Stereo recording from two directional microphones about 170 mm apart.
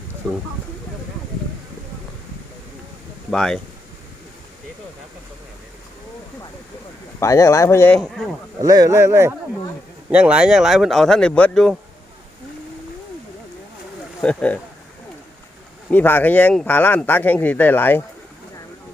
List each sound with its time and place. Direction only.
3.2 s speech: 5° left (ahead or behind)
7.2 s speech: 20° left (ahead or behind)
8.0 s speech: centre (ahead or behind)
8.6 s speech: 20° right (ahead or behind); by 11.8 s 5° left (ahead or behind)
14.2 s speech: 10° left (ahead or behind)
15.9 s speech: 10° left (ahead or behind)